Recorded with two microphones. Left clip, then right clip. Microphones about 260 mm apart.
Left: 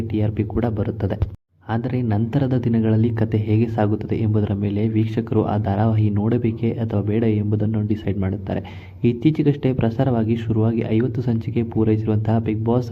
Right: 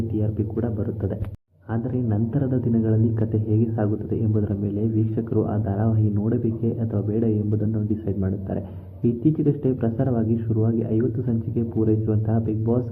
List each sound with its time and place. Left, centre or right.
0.2 s speech: left